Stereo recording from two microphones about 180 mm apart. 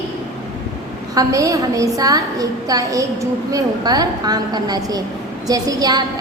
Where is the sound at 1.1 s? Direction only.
20° right (ahead or behind).